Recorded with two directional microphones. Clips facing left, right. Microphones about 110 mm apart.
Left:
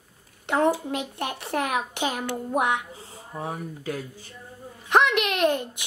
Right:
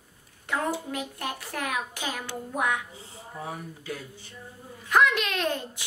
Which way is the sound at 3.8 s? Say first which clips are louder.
Left 5 dB; 45° left (ahead or behind).